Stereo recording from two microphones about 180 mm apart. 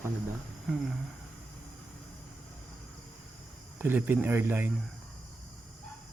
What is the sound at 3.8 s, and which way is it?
Speech, 10° right (ahead or behind).